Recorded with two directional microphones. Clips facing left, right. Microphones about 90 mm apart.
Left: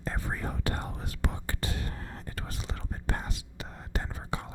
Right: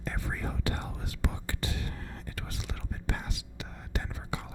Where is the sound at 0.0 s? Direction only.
35° left (ahead or behind).